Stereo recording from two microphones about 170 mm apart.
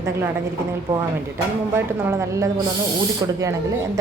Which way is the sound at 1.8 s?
15° right (ahead or behind).